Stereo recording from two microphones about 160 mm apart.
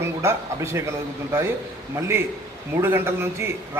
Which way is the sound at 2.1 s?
15° right (ahead or behind).